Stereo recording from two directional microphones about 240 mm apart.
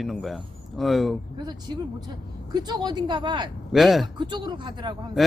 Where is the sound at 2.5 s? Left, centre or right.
Centre.